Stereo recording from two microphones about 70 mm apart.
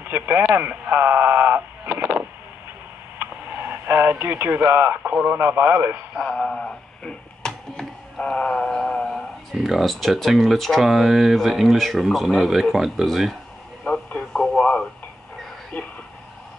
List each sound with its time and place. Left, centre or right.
0.0 s speech: right
3.2 s radio: right
5.1 s speech: right
6.2 s speech: centre
13.8 s radio: centre
15.7 s speech: centre